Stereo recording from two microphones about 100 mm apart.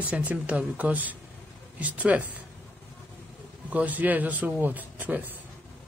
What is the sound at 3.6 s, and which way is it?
Speech, 15° right (ahead or behind).